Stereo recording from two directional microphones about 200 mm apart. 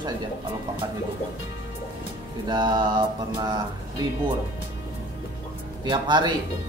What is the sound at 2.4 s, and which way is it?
Mantra, 20° right (ahead or behind).